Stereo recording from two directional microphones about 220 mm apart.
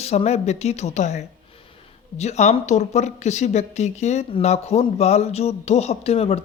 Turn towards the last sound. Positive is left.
turn(degrees=25)  # may be behind; listen again after turning